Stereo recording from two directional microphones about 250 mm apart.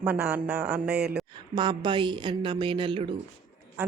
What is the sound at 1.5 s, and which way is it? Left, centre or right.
A woman's voice, centre.